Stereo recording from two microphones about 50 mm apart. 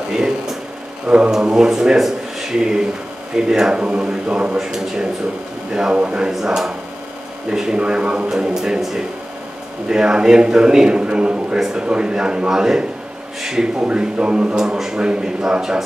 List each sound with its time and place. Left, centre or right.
0.1 s a sound: centre
1.0 s a man's voice: right
1.3 s a man's voice: centre
4.6 s a man's voice: centre
6.3 s a man's voice: centre
13.8 s a man's voice: right
14.6 s a man's voice: centre